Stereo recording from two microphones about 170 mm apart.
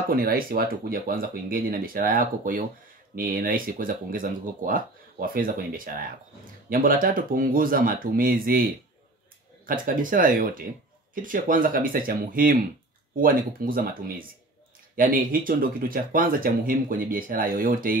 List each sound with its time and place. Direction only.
0.1 s speech: 60° right (ahead or behind)
9.7 s speech: 55° right (ahead or behind)